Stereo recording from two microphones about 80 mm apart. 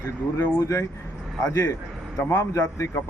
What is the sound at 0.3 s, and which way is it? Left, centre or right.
A man's voice, left.